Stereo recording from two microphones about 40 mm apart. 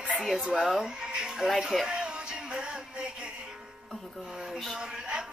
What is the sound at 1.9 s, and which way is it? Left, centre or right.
Music, right.